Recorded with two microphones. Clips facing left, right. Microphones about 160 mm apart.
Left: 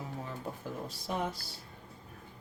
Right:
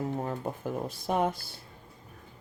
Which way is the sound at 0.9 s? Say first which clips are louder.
Right 7 dB; 55° right (ahead or behind).